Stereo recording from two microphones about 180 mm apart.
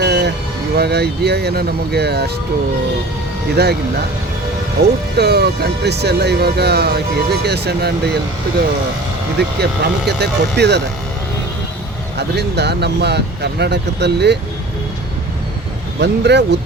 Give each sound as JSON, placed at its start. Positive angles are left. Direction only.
{"t": 0.0, "sound": "music", "side_deg": -65}
{"t": 0.8, "sound": "speech", "side_deg": -65}
{"t": 3.5, "sound": "speech", "side_deg": -65}
{"t": 4.8, "sound": "speech", "side_deg": -65}
{"t": 9.4, "sound": "speech", "side_deg": -70}
{"t": 12.4, "sound": "speech", "side_deg": -70}
{"t": 16.0, "sound": "speech", "side_deg": -70}